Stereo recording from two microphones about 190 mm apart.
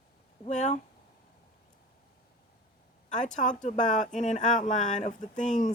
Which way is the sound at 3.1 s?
40° left (ahead or behind).